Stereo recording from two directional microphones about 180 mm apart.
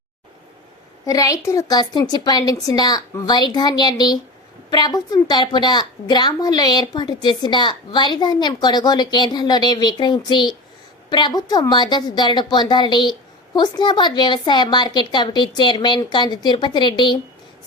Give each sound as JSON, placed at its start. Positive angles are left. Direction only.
{"t": 1.0, "sound": "a woman's voice", "side_deg": 20}